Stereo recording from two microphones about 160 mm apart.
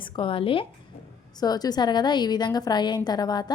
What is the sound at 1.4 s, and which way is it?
A woman's voice, 25° left (ahead or behind).